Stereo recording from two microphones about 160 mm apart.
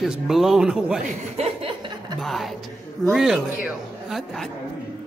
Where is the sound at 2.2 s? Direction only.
Centre (ahead or behind).